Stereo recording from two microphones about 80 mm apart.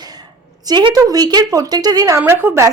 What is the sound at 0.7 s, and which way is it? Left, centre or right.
A woman's voice, right.